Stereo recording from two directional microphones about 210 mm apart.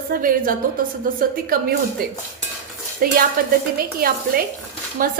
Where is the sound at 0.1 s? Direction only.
40° right (ahead or behind).